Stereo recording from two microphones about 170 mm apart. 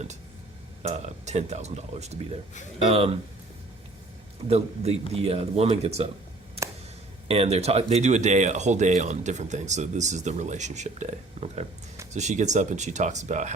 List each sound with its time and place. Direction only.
0.8 s speech: 40° right (ahead or behind)
4.4 s speech: 40° right (ahead or behind)
7.3 s speech: 35° right (ahead or behind)